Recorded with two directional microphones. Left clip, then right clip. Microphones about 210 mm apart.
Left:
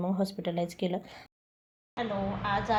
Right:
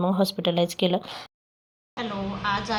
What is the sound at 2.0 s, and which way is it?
Speech, centre (ahead or behind).